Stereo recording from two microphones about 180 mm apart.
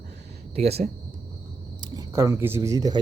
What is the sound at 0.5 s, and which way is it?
Speech, 35° right (ahead or behind).